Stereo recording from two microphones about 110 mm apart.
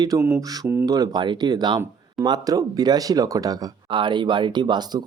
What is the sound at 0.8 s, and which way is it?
Speech, 35° right (ahead or behind).